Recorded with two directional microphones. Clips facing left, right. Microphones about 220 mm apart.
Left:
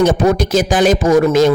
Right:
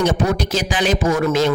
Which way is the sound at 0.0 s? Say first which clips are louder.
Left 6 dB; 45° left (ahead or behind).